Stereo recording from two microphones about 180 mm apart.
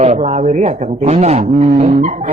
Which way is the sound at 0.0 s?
40° right (ahead or behind).